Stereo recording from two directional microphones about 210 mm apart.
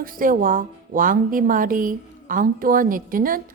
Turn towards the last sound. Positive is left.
turn(degrees=-40)  # may be behind; listen again after turning